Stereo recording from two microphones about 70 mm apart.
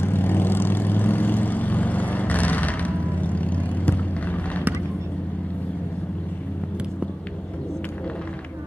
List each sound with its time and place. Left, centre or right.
0.0 s vehicle: left